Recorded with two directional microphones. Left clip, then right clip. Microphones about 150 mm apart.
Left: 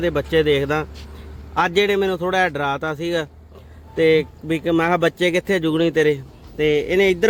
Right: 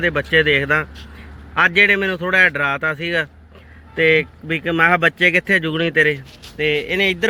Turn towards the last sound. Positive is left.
turn(degrees=40)  # may be behind; listen again after turning